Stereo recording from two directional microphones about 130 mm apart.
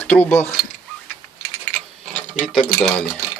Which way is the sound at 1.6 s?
10° left (ahead or behind).